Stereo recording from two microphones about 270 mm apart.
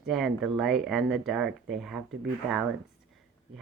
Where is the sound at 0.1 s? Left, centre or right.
Centre.